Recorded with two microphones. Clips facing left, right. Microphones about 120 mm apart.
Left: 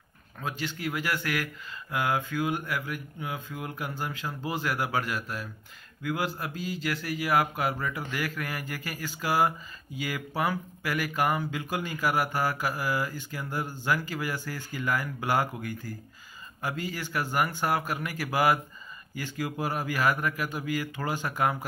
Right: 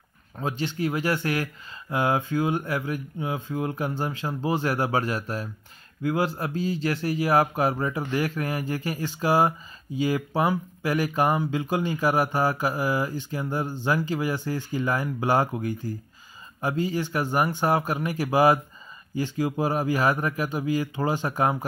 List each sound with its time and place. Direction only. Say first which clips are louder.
0.4 s speech: right 6 dB; 30° right (ahead or behind)